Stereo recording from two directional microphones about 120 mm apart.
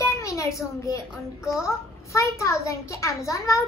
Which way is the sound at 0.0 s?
25° left (ahead or behind).